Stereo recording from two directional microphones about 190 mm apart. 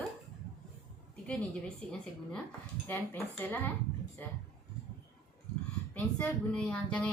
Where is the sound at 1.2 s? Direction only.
5° left (ahead or behind).